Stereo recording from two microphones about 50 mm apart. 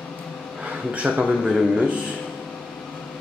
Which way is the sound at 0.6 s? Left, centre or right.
Right.